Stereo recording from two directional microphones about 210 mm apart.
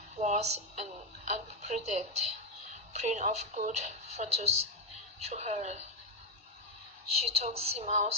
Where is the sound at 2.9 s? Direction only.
35° right (ahead or behind).